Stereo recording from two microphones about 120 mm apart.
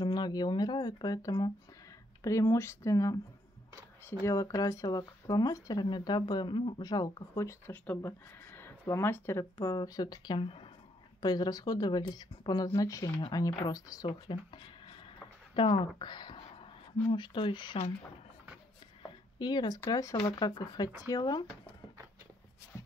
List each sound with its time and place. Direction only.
0.0 s speech: 35° left (ahead or behind)
4.2 s speech: 25° left (ahead or behind)
9.6 s speech: 35° left (ahead or behind); by 10.7 s 50° left (ahead or behind)
11.1 s speech: 35° left (ahead or behind)
14.0 s speech: 45° left (ahead or behind)
19.0 s a sound: 40° left (ahead or behind)
19.9 s speech: 25° left (ahead or behind)